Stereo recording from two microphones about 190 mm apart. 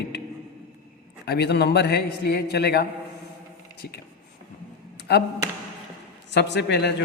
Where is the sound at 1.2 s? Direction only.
60° left (ahead or behind).